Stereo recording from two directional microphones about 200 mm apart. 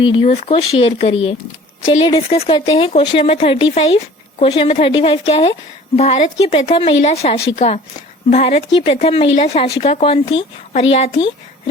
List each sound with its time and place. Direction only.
0.0 s a woman's voice: 25° left (ahead or behind)